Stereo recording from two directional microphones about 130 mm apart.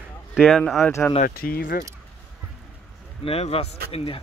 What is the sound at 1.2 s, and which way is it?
Speech, 90° left.